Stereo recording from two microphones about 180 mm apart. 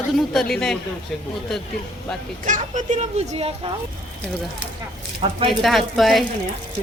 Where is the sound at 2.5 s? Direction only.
45° right (ahead or behind).